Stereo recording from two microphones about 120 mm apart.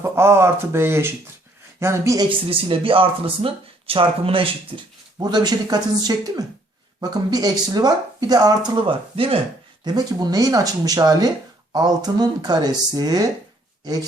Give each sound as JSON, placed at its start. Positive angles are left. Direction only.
{"t": 0.0, "sound": "speech", "side_deg": -20}
{"t": 2.5, "sound": "speech", "side_deg": -50}
{"t": 5.2, "sound": "speech", "side_deg": -35}
{"t": 9.8, "sound": "speech", "side_deg": -35}